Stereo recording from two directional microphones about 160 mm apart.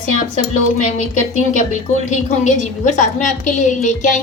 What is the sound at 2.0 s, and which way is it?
A woman's voice, 50° left (ahead or behind).